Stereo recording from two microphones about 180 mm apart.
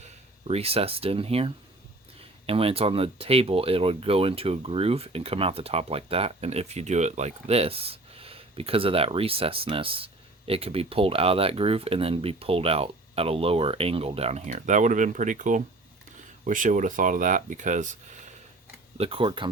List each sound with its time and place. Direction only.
0.0 s speech: 35° right (ahead or behind)
18.9 s speech: 30° right (ahead or behind)